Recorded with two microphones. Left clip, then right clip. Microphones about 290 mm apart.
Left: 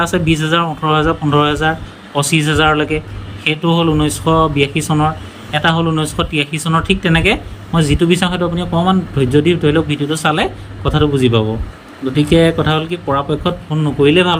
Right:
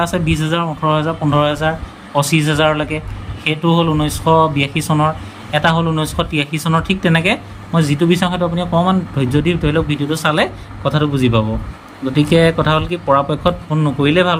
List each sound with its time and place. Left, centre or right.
0.0 s speech: centre